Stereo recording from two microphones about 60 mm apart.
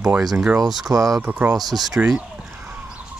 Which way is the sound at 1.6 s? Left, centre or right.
Centre.